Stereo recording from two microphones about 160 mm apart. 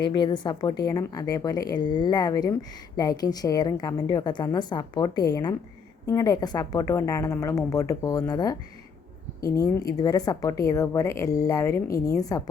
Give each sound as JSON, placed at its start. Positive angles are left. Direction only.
{"t": 0.0, "sound": "a woman's voice", "side_deg": 30}